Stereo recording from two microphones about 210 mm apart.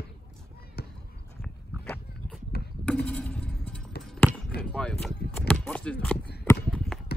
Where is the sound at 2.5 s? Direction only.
50° left (ahead or behind).